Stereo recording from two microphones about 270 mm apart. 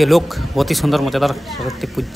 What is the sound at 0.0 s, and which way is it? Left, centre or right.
A man's voice, centre.